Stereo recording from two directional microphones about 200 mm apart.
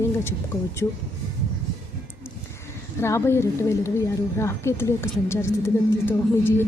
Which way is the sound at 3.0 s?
15° left (ahead or behind).